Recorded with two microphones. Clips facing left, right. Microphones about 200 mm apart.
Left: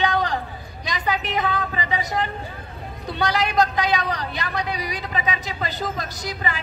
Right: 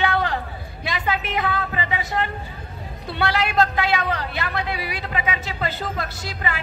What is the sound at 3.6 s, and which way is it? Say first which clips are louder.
Speech: even; 15° left (ahead or behind).